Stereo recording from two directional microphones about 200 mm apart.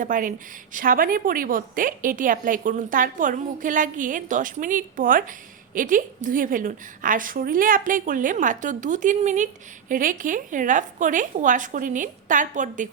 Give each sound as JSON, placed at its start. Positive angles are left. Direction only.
{"t": 0.0, "sound": "a woman's voice", "side_deg": -40}